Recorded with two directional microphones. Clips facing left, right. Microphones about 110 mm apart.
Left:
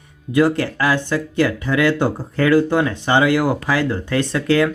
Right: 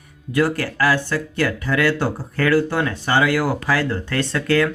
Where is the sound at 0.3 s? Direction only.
20° left (ahead or behind).